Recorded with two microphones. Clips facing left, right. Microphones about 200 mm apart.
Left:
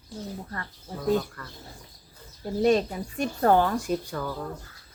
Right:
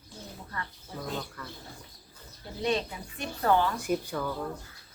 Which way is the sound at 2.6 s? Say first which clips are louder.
Left 7 dB; 45° left (ahead or behind).